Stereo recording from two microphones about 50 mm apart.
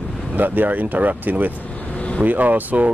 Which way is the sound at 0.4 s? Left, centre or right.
Right.